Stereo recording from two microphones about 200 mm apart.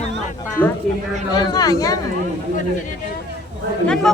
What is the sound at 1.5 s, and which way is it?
Speech, 20° left (ahead or behind).